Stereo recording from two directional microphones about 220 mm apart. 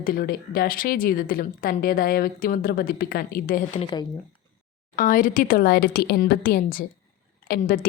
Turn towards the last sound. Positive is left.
turn(degrees=40)  # may be behind; listen again after turning